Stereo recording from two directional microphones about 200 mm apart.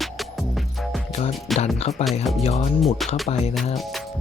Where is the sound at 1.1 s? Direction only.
35° left (ahead or behind).